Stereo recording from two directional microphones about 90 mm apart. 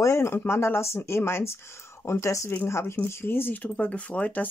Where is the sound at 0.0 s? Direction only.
30° left (ahead or behind).